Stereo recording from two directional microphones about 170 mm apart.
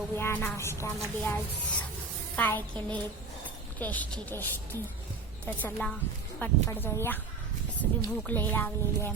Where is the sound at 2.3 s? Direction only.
10° left (ahead or behind).